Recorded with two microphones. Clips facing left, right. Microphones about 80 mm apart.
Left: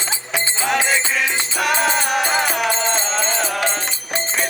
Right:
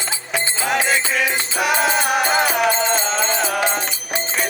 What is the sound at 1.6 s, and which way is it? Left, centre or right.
Music, centre.